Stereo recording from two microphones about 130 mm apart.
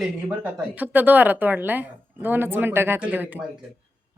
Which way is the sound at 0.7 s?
10° right (ahead or behind).